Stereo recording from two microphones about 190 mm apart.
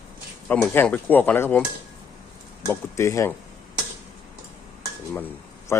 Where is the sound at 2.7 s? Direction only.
15° left (ahead or behind).